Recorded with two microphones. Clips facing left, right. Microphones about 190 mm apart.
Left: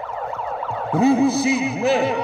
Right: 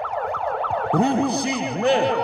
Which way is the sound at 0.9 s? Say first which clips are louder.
Left 5 dB; 5° left (ahead or behind).